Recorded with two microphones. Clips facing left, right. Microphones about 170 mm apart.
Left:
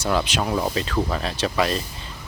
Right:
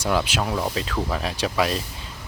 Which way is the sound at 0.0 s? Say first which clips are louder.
Even; 5° right (ahead or behind).